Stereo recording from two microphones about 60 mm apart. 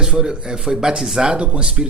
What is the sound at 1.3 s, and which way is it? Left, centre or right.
Speech, centre.